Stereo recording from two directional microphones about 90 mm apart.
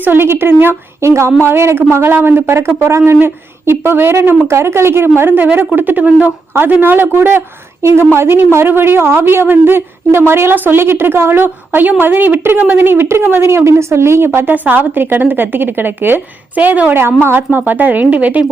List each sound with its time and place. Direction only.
0.0 s a woman's voice: 25° right (ahead or behind)